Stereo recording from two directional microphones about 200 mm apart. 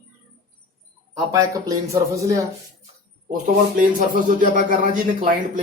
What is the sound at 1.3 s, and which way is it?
Speech, 15° right (ahead or behind).